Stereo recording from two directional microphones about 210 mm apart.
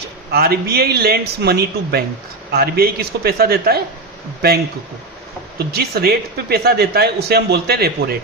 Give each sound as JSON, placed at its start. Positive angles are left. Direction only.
{"t": 0.3, "sound": "a man's voice", "side_deg": -45}